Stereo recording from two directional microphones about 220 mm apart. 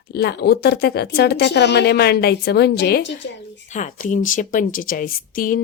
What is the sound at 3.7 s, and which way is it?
A woman's voice, 35° left (ahead or behind).